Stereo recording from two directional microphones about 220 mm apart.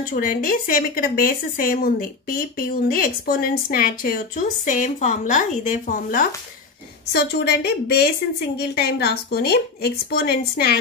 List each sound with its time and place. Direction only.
0.0 s speech: 40° left (ahead or behind)
7.1 s speech: 50° left (ahead or behind)